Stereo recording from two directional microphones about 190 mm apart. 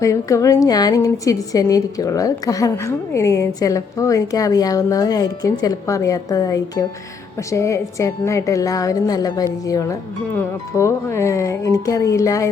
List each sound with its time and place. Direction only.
0.0 s a woman's voice: 15° left (ahead or behind)